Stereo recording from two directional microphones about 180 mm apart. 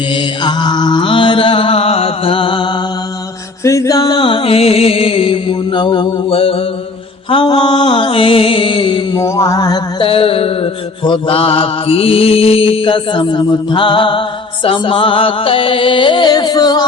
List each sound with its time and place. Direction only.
0.4 s mantra: 25° left (ahead or behind)
3.6 s music: 15° left (ahead or behind)
9.1 s mantra: 15° left (ahead or behind)
14.6 s music: 30° left (ahead or behind)